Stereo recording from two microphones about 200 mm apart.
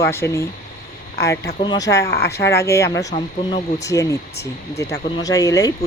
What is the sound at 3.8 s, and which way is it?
Speech, 15° left (ahead or behind).